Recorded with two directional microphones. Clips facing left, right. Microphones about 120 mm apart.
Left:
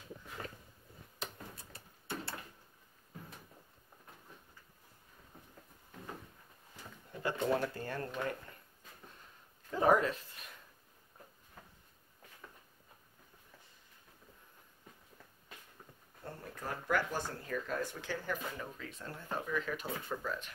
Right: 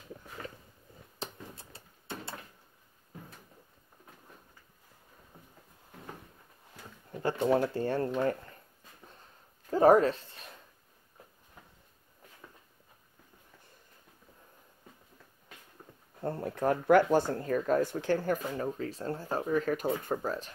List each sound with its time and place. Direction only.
1.2 s a sound: 25° right (ahead or behind)
7.2 s speech: 30° right (ahead or behind)
9.7 s dog: 35° right (ahead or behind)
16.2 s speech: 55° right (ahead or behind); by 20.5 s 35° right (ahead or behind)